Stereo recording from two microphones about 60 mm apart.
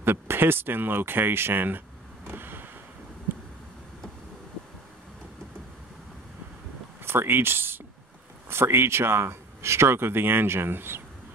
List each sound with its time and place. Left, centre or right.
0.0 s speech: right
2.2 s vehicle: right
7.1 s speech: right